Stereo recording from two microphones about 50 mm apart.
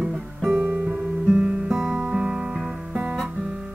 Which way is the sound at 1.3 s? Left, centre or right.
Centre.